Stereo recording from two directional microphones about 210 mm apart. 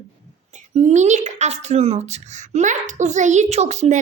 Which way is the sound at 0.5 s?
35° right (ahead or behind).